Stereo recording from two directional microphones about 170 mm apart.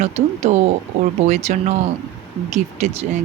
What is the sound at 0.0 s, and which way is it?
Speech, 40° right (ahead or behind).